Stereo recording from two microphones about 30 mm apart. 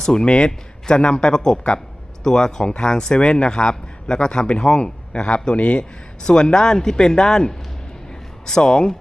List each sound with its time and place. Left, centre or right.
0.0 s a man's voice: left
6.2 s speech: left